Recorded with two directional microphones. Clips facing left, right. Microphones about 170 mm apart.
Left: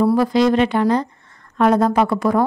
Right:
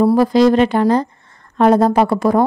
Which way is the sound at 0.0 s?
35° right (ahead or behind).